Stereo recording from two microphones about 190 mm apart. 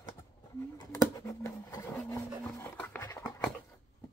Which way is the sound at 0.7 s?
20° left (ahead or behind).